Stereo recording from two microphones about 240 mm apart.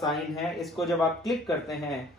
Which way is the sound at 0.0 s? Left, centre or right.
Centre.